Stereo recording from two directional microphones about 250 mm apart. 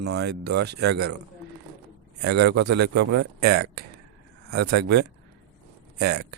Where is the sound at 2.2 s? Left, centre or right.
Right.